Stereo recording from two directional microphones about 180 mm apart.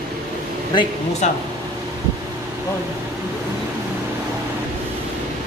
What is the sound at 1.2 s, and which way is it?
Speech, 40° left (ahead or behind).